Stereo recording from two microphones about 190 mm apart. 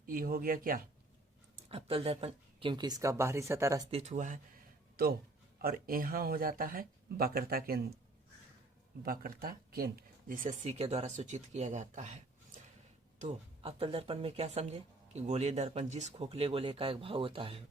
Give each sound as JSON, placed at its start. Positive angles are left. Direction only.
{"t": 0.0, "sound": "speech", "side_deg": -50}
{"t": 1.7, "sound": "speech", "side_deg": -30}
{"t": 3.9, "sound": "speech", "side_deg": -40}
{"t": 5.0, "sound": "speech", "side_deg": -55}
{"t": 9.0, "sound": "speech", "side_deg": -50}
{"t": 13.2, "sound": "speech", "side_deg": -30}